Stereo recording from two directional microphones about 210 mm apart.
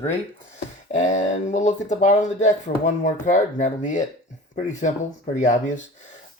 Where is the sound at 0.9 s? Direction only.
35° left (ahead or behind).